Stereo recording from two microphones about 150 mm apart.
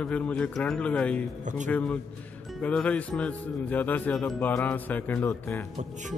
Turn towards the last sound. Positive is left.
turn(degrees=10)  # may be behind; listen again after turning